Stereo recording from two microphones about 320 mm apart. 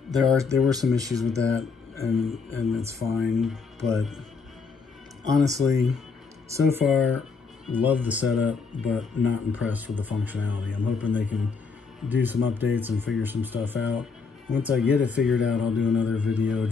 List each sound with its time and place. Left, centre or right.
0.1 s speech: centre
5.2 s speech: centre